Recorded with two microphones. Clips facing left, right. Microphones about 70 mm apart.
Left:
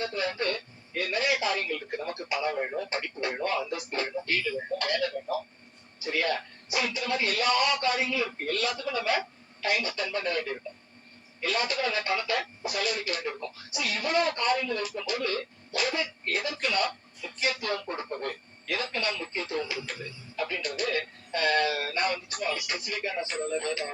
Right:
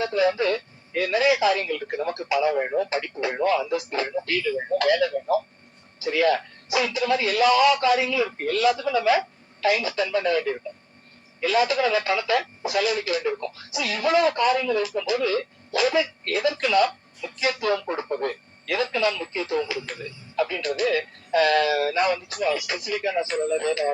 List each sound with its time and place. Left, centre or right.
0.0 s speech: right
11.5 s speech: right
18.6 s speech: right